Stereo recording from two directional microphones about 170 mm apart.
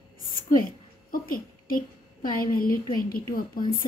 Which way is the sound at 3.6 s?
30° left (ahead or behind).